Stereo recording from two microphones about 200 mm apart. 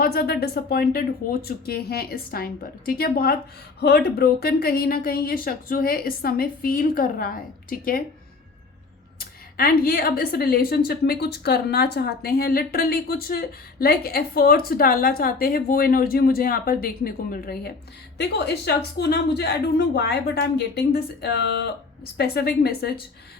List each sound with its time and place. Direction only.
0.0 s a woman's voice: 50° left (ahead or behind)
9.1 s a woman's voice: 50° left (ahead or behind)